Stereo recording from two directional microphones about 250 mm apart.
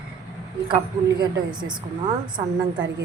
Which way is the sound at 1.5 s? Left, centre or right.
Centre.